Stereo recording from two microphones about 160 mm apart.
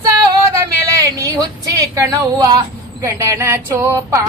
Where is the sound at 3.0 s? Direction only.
15° right (ahead or behind).